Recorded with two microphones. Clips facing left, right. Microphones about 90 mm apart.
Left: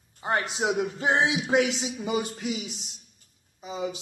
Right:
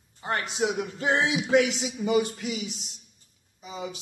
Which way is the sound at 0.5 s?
40° left (ahead or behind).